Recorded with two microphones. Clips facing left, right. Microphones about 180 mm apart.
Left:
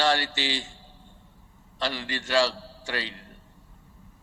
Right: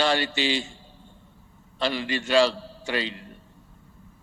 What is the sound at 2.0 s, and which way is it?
A man's voice, 20° right (ahead or behind).